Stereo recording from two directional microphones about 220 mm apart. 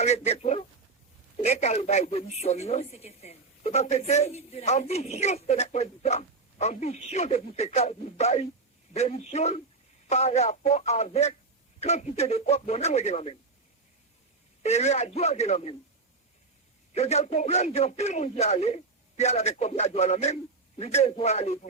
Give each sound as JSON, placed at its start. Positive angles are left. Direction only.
{"t": 0.0, "sound": "speech", "side_deg": 30}
{"t": 14.6, "sound": "speech", "side_deg": 30}
{"t": 16.9, "sound": "speech", "side_deg": 30}